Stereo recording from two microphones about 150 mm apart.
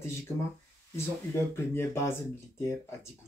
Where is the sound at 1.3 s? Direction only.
15° left (ahead or behind).